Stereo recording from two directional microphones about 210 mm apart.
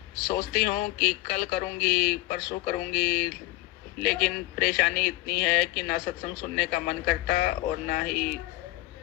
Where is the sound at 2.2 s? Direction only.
45° left (ahead or behind).